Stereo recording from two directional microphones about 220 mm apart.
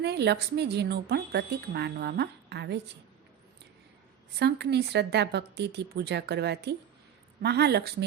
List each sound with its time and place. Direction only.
0.0 s a woman's voice: 50° right (ahead or behind)
4.4 s a woman's voice: 50° right (ahead or behind)